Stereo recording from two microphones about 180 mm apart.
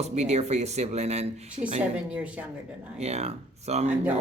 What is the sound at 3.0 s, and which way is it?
Speech, 35° right (ahead or behind).